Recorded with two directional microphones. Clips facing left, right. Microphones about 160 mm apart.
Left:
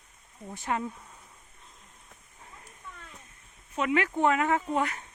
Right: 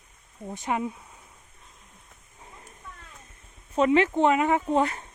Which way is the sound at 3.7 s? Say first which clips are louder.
Right 6 dB; 30° right (ahead or behind).